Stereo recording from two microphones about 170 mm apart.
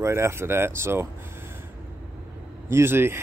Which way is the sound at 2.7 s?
15° right (ahead or behind).